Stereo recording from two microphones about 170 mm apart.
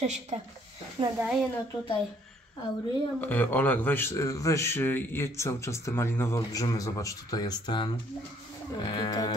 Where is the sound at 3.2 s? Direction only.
10° left (ahead or behind).